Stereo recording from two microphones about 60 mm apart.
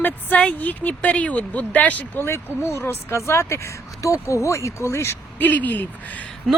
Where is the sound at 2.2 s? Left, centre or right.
Left.